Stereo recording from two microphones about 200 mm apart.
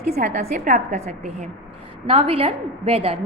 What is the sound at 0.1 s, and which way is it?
A woman's voice, 40° right (ahead or behind).